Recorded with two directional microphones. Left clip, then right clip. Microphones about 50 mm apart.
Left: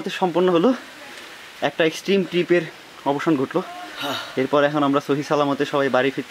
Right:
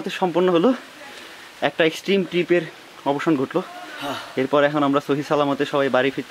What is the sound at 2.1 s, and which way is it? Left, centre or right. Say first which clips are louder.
Speech: even; left.